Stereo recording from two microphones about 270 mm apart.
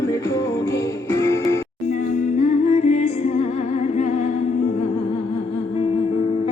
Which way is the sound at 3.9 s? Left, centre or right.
Left.